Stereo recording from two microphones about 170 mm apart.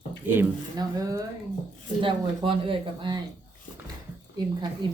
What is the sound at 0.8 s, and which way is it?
Speech, 20° right (ahead or behind).